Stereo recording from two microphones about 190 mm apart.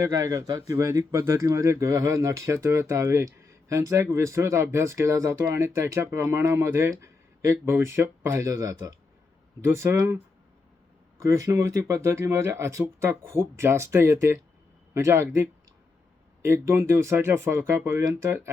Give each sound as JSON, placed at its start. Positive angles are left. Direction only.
{"t": 0.0, "sound": "a man's voice", "side_deg": -20}
{"t": 11.2, "sound": "speech", "side_deg": -15}